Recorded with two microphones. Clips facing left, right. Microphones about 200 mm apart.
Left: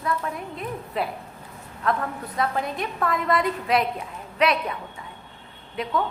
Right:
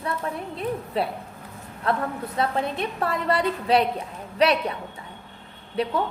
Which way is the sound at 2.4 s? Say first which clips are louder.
Right 1 dB; 30° right (ahead or behind).